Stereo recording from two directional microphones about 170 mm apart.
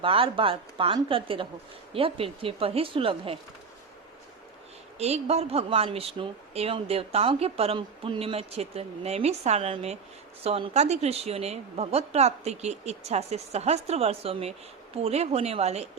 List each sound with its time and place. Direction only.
0.0 s a woman's voice: 30° right (ahead or behind)
4.9 s a woman's voice: 40° right (ahead or behind)